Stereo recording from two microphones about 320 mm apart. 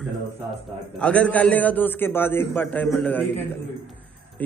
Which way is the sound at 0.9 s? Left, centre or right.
Centre.